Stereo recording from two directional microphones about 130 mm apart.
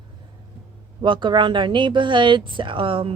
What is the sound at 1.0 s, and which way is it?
Speech, 35° right (ahead or behind).